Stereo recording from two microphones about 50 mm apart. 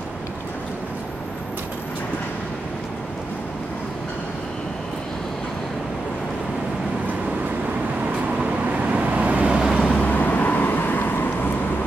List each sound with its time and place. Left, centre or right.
8.9 s vehicle: right
9.8 s vehicle: centre
10.0 s vehicle: left